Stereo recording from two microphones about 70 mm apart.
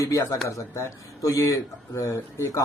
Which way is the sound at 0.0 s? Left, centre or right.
Left.